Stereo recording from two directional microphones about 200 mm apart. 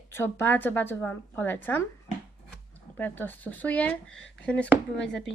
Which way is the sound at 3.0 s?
10° left (ahead or behind).